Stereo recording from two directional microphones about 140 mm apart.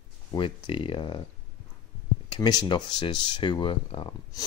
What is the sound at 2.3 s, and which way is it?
Speech, 30° left (ahead or behind).